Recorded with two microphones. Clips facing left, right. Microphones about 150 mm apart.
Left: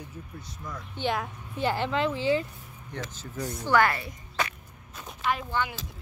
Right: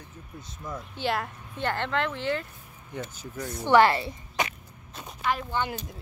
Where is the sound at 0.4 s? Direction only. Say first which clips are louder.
Right 5 dB; 25° right (ahead or behind).